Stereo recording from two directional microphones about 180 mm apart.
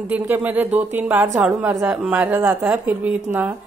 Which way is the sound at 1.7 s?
15° right (ahead or behind).